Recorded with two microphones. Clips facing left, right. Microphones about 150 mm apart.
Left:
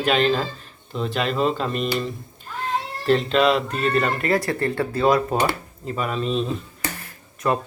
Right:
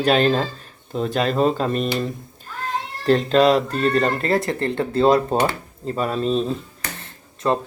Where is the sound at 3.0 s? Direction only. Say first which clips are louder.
Right 3 dB; 40° right (ahead or behind).